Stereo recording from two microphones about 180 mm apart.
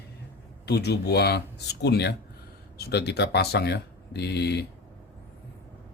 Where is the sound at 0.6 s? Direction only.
65° left (ahead or behind).